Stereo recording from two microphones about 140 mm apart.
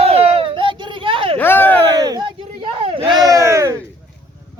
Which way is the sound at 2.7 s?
40° right (ahead or behind).